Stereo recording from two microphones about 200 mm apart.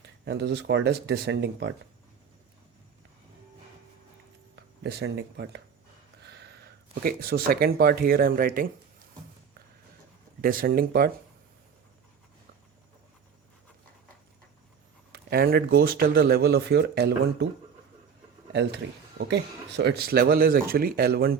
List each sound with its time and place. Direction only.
0.3 s speech: 55° right (ahead or behind)
4.5 s speech: 55° right (ahead or behind)
10.4 s speech: 45° right (ahead or behind)
15.1 s speech: 50° right (ahead or behind)
18.5 s speech: 60° right (ahead or behind)